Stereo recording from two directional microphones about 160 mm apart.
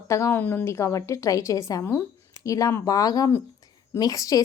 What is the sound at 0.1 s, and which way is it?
A woman's voice, 15° left (ahead or behind).